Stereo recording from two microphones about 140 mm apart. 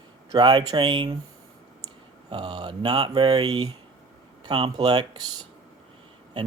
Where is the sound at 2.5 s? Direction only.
30° right (ahead or behind).